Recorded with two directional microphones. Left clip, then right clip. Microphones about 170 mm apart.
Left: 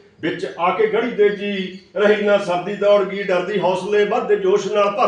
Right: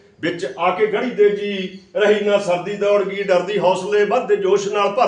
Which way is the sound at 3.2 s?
25° right (ahead or behind).